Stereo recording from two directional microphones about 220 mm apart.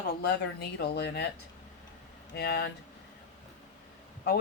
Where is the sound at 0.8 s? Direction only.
50° left (ahead or behind).